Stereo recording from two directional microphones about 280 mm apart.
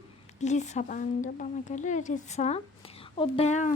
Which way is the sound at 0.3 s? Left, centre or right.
Left.